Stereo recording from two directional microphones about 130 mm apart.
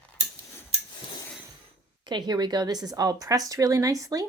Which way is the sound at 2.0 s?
35° right (ahead or behind).